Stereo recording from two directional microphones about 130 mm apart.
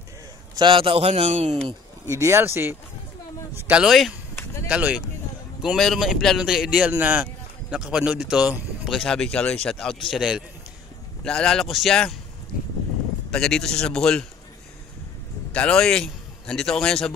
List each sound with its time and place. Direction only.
0.6 s a man's voice: 40° right (ahead or behind); by 1.6 s 60° right (ahead or behind)
2.0 s speech: 20° right (ahead or behind); by 10.4 s 5° right (ahead or behind)
11.2 s speech: 5° left (ahead or behind)
13.3 s speech: 5° left (ahead or behind)
15.5 s a man's voice: 5° left (ahead or behind)